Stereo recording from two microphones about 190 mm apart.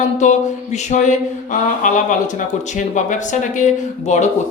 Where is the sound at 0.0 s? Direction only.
40° left (ahead or behind).